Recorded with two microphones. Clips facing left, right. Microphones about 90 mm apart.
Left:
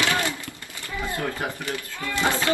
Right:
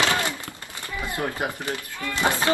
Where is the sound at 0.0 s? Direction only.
20° right (ahead or behind).